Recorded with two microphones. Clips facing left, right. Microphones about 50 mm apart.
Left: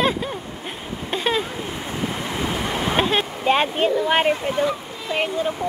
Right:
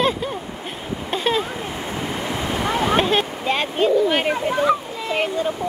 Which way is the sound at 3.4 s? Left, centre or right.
Left.